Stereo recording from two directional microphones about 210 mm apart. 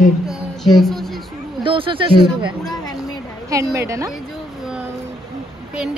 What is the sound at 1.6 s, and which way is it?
Speech, 25° right (ahead or behind).